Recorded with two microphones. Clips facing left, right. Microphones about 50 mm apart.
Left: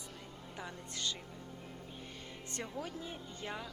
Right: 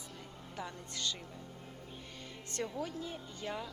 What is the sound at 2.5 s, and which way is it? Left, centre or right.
Speech, centre.